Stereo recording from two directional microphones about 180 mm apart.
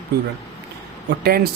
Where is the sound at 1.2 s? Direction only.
60° right (ahead or behind).